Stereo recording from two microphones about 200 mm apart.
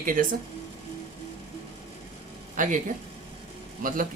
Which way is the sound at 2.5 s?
40° right (ahead or behind).